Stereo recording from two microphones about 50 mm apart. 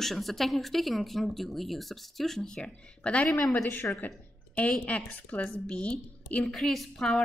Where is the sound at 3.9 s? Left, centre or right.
Left.